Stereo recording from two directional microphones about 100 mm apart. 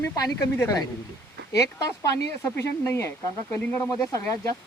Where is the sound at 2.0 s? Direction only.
25° left (ahead or behind).